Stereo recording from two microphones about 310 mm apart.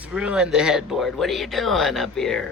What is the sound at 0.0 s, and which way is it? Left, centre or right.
Speech, centre.